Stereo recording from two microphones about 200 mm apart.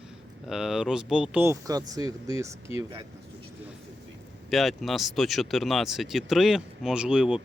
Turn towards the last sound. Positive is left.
turn(degrees=-5)  # may be behind; listen again after turning